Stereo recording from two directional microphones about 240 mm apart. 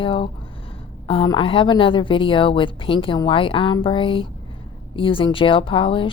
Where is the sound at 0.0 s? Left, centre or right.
Left.